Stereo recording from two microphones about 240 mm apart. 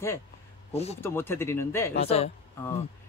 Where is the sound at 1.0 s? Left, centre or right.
Centre.